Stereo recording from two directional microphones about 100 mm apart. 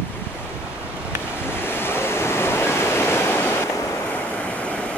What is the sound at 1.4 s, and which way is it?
Waves, 20° left (ahead or behind).